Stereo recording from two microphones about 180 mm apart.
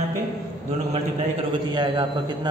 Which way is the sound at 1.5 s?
25° right (ahead or behind).